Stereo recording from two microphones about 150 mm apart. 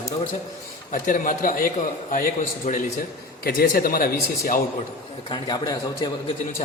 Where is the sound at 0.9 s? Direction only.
60° left (ahead or behind).